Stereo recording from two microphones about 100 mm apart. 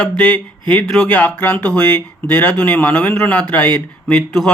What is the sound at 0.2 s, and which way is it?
Speech, 10° left (ahead or behind).